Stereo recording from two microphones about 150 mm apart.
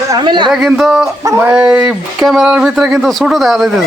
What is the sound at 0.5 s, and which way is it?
Speech, 5° right (ahead or behind).